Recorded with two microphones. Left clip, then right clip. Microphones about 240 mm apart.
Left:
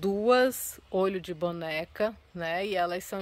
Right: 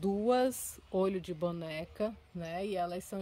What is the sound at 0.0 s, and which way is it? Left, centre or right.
Speech, centre.